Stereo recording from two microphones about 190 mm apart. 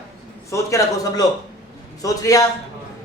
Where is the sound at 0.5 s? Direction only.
15° left (ahead or behind).